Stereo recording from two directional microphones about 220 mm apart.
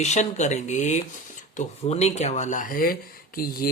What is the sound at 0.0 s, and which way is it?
Speech, 30° left (ahead or behind).